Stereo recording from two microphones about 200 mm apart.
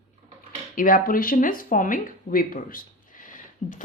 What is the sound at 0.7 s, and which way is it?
A woman's voice, 45° left (ahead or behind).